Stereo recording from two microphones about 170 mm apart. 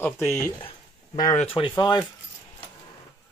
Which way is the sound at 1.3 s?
35° left (ahead or behind).